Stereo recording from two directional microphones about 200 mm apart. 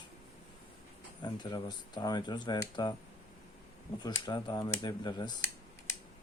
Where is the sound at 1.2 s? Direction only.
20° left (ahead or behind).